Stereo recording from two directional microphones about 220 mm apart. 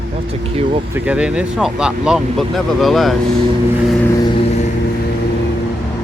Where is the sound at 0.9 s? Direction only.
5° right (ahead or behind).